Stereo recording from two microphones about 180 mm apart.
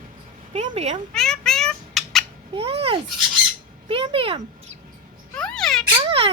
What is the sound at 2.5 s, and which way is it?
A child's voice, 35° right (ahead or behind).